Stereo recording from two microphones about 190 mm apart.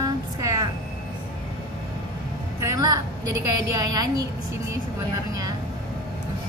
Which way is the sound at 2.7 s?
20° right (ahead or behind).